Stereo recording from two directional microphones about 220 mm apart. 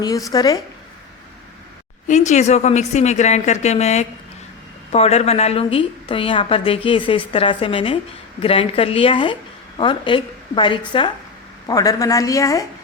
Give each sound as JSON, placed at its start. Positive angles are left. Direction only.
{"t": 0.0, "sound": "a woman's voice", "side_deg": 15}
{"t": 2.0, "sound": "a woman's voice", "side_deg": 35}